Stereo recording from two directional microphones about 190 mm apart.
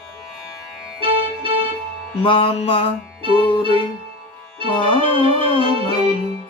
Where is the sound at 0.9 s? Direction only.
30° right (ahead or behind).